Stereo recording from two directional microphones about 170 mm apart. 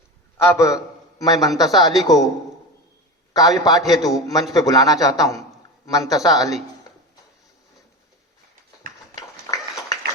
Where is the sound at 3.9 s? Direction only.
Centre (ahead or behind).